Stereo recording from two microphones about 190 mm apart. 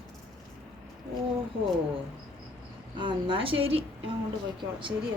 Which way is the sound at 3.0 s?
25° right (ahead or behind).